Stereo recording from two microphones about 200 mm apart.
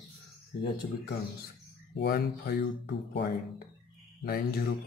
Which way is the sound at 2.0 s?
50° left (ahead or behind).